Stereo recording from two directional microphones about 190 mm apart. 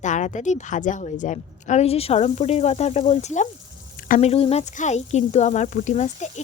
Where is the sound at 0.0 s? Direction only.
40° left (ahead or behind).